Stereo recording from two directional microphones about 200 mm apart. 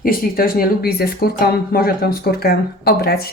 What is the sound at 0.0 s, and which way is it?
Speech, 45° left (ahead or behind).